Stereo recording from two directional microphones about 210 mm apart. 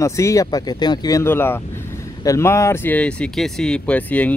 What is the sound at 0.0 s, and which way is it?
Speech, 15° left (ahead or behind).